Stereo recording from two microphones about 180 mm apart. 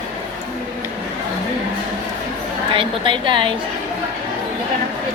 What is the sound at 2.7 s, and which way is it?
Speech, 30° right (ahead or behind).